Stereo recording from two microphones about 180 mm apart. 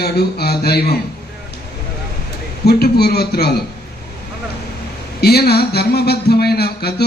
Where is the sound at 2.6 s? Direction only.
60° left (ahead or behind).